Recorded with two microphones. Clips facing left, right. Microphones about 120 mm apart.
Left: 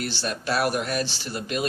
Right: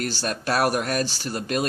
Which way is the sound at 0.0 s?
45° right (ahead or behind).